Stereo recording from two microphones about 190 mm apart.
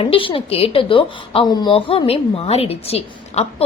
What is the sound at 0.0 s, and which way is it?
Speech, 30° left (ahead or behind).